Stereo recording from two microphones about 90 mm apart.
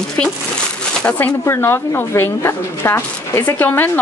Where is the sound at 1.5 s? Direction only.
25° left (ahead or behind).